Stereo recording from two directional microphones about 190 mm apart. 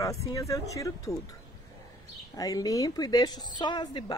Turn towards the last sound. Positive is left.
turn(degrees=25)  # may be behind; listen again after turning